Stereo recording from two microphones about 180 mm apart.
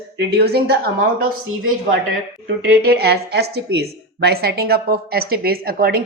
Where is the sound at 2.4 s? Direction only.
60° right (ahead or behind).